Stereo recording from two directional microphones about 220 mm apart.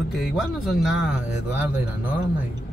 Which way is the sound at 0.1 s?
Centre (ahead or behind).